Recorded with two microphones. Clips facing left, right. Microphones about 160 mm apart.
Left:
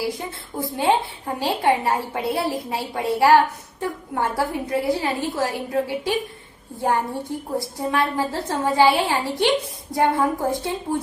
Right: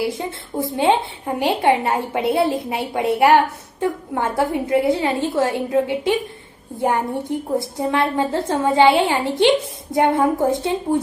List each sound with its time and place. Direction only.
0.0 s a woman's voice: 25° right (ahead or behind)